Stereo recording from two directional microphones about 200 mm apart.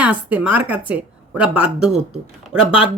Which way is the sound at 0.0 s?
5° right (ahead or behind).